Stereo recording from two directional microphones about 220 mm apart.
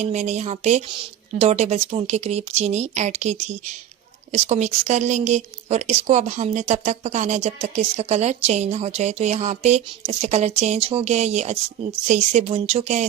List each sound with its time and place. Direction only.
0.0 s a woman's voice: 30° right (ahead or behind)